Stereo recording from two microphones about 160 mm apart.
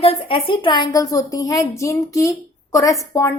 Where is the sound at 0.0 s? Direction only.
35° left (ahead or behind).